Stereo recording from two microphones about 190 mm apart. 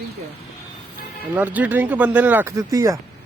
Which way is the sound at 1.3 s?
10° right (ahead or behind).